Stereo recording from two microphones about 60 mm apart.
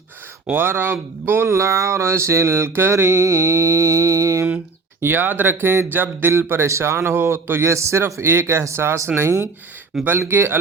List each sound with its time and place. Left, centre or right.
0.5 s speech: right
2.9 s mantra: right
4.9 s speech: right